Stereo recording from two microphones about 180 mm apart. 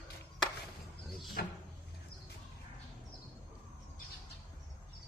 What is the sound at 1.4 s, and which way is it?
Speech, 55° left (ahead or behind).